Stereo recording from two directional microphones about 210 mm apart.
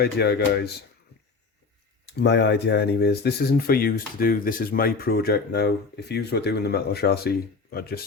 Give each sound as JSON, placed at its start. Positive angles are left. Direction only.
{"t": 0.0, "sound": "speech", "side_deg": 50}
{"t": 2.0, "sound": "speech", "side_deg": 55}